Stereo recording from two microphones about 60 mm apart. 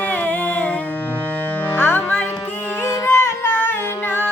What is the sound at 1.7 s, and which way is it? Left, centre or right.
Music, left.